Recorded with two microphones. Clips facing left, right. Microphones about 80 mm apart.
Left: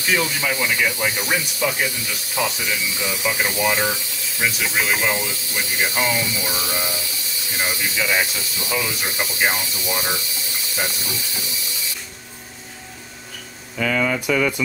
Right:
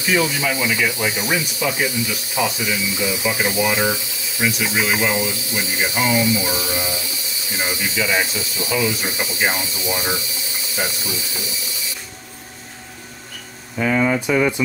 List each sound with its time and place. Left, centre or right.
0.0 s speech: centre
13.7 s speech: right